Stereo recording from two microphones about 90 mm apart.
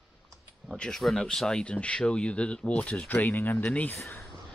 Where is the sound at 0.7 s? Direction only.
5° left (ahead or behind).